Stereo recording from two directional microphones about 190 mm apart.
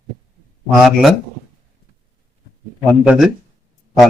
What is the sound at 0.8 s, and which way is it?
Speech, centre (ahead or behind).